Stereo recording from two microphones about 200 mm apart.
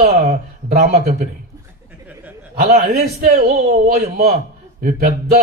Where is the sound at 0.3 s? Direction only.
35° right (ahead or behind).